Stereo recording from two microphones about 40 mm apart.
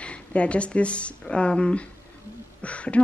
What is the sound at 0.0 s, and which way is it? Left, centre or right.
Speech, left.